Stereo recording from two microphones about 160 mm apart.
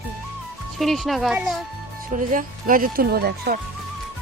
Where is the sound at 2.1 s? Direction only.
55° right (ahead or behind); by 3.5 s 75° right (ahead or behind).